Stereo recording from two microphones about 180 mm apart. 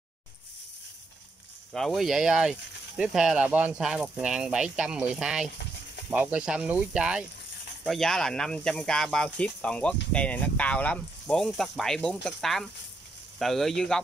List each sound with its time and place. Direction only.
1.7 s speech: centre (ahead or behind)